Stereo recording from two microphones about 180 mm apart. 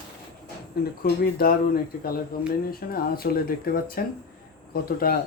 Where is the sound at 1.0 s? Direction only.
55° left (ahead or behind).